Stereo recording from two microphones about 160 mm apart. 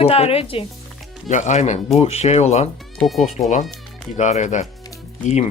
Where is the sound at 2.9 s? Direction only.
Centre (ahead or behind).